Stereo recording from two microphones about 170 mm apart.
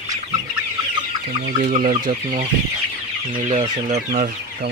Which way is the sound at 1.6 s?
50° right (ahead or behind).